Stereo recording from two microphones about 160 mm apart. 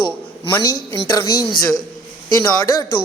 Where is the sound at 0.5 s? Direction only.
20° left (ahead or behind).